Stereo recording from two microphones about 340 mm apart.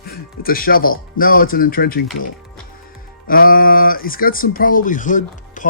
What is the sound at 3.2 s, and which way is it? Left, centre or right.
Speech, left.